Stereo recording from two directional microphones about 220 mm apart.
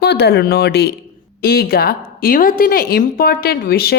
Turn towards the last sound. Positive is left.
turn(degrees=45)  # may be behind; listen again after turning